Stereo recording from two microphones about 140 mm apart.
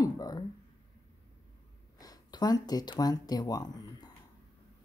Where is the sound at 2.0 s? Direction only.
30° left (ahead or behind).